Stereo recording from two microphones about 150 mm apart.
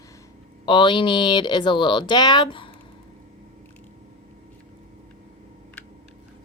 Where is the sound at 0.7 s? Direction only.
30° left (ahead or behind).